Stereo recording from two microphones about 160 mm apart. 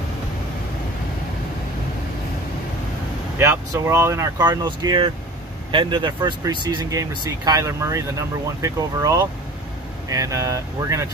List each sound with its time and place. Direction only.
3.3 s speech: 15° right (ahead or behind)